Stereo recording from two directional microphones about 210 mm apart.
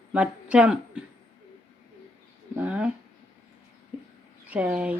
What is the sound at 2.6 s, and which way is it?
Speech, 5° right (ahead or behind).